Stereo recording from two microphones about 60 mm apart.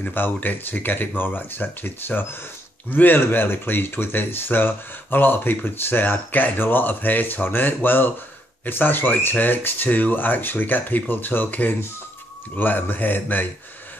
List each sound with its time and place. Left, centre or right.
0.0 s speech: left